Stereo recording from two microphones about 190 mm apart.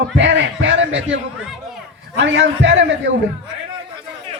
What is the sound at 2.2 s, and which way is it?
Speech, 70° right (ahead or behind).